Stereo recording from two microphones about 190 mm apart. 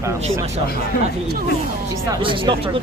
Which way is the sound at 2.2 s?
25° right (ahead or behind).